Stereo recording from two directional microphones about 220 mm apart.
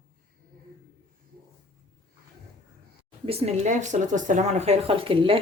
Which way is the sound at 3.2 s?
30° right (ahead or behind).